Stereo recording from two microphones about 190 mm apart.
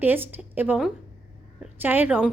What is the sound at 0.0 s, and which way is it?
A woman's voice, 10° right (ahead or behind).